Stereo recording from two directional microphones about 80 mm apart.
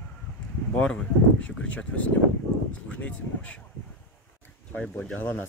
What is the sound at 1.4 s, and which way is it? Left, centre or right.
Speech, centre.